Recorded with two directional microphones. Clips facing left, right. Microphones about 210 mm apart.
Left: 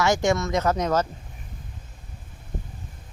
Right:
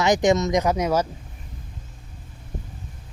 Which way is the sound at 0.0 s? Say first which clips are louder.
Right 3 dB; 15° right (ahead or behind).